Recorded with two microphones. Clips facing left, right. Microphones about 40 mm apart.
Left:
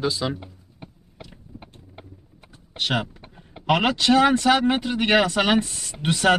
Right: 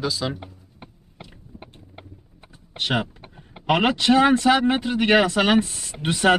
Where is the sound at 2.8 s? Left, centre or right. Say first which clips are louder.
Right 1 dB; centre.